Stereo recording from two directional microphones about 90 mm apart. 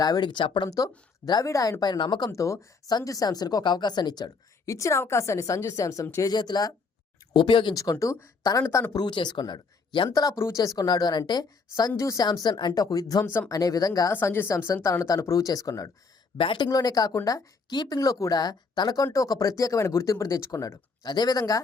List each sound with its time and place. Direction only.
0.0 s speech: 50° left (ahead or behind)
0.7 s speech: 40° left (ahead or behind)
1.8 s speech: 55° left (ahead or behind)
2.3 s speech: 35° left (ahead or behind)
4.6 s speech: 35° left (ahead or behind)
6.3 s speech: 55° left (ahead or behind)
7.3 s speech: 60° left (ahead or behind)
7.8 s speech: 40° left (ahead or behind)
8.9 s speech: 55° left (ahead or behind)
10.3 s speech: 35° left (ahead or behind)
14.1 s speech: 25° left (ahead or behind); by 21.6 s 45° left (ahead or behind)